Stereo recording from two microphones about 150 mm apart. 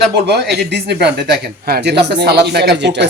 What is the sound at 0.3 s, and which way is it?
Speech, 90° right.